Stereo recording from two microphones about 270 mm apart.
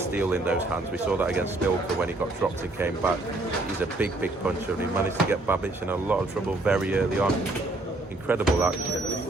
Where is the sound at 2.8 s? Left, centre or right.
Centre.